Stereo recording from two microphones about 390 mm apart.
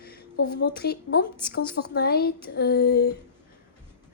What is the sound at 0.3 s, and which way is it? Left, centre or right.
Speech, left.